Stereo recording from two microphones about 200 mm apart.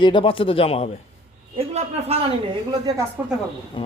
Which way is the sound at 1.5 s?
30° right (ahead or behind).